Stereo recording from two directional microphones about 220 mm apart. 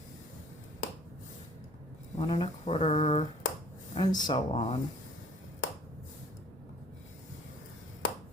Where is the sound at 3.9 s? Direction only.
20° left (ahead or behind).